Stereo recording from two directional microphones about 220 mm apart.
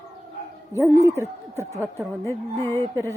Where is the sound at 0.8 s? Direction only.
10° right (ahead or behind).